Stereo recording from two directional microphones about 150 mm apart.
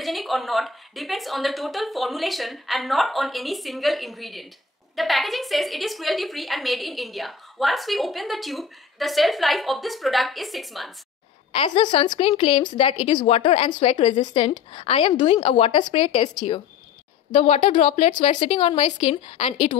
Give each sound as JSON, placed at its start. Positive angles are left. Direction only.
{"t": 0.0, "sound": "a woman's voice", "side_deg": 0}
{"t": 11.5, "sound": "a woman's voice", "side_deg": 35}
{"t": 17.3, "sound": "speech", "side_deg": 50}
{"t": 18.4, "sound": "a woman's voice", "side_deg": 35}